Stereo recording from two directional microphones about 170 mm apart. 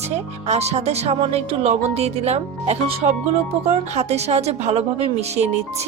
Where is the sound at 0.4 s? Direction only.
40° right (ahead or behind).